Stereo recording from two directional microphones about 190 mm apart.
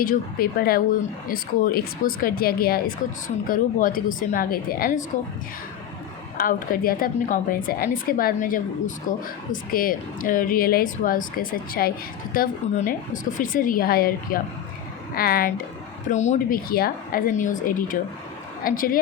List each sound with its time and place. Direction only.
0.0 s a woman's voice: 50° left (ahead or behind)
6.3 s a woman's voice: 50° left (ahead or behind)
16.0 s a woman's voice: 40° left (ahead or behind)